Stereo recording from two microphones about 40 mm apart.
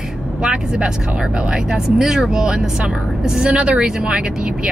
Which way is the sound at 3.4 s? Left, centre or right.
Right.